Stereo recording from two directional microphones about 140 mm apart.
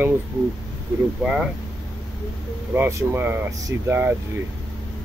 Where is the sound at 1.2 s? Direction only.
5° right (ahead or behind).